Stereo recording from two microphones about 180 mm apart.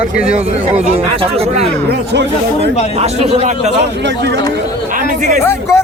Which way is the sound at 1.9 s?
70° right (ahead or behind).